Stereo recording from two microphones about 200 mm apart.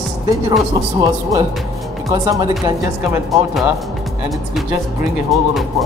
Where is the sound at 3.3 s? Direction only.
Centre (ahead or behind).